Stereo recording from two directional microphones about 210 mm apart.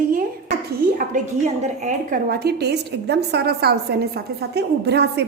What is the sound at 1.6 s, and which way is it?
A woman's voice, 35° right (ahead or behind).